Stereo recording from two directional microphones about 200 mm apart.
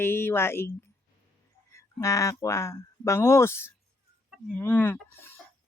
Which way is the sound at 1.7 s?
15° left (ahead or behind).